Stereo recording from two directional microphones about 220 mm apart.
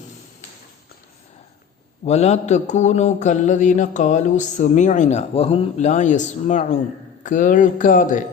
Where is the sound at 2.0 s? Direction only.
30° left (ahead or behind).